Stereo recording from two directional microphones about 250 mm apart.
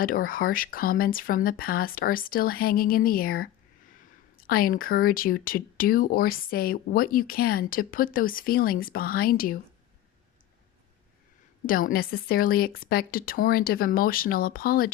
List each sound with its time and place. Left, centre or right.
0.0 s speech: left
11.6 s speech: left